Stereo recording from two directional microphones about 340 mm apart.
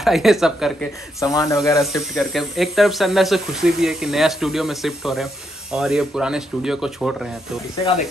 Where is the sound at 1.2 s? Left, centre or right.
Centre.